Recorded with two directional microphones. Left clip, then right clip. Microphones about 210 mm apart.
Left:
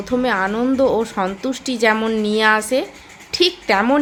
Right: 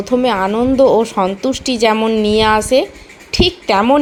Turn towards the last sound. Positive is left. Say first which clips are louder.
# right 4 dB
turn(degrees=-10)  # may be behind; listen again after turning